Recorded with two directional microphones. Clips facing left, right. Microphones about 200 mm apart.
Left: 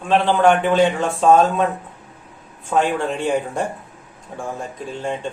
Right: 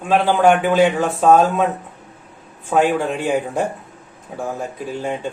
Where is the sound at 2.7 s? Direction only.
10° right (ahead or behind).